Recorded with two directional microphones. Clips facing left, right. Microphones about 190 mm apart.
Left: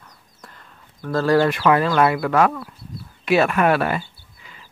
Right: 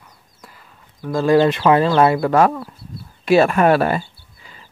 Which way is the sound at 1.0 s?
10° right (ahead or behind).